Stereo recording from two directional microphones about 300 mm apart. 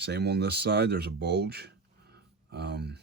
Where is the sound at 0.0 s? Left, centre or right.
Right.